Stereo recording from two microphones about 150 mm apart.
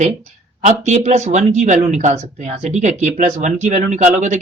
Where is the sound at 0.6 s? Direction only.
50° right (ahead or behind).